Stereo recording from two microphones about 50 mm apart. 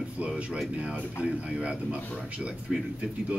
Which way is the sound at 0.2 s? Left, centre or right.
Right.